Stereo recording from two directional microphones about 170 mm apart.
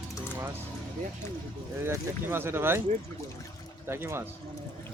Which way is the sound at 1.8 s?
15° right (ahead or behind).